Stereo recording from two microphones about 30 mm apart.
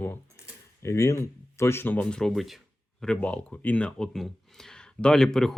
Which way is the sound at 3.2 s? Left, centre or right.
Left.